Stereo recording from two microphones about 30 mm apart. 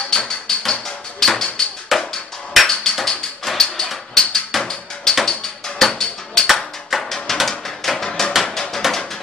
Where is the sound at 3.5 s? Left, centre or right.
Centre.